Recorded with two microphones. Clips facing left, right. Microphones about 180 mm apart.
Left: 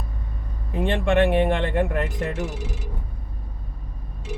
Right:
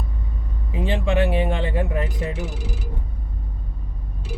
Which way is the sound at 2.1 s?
5° right (ahead or behind).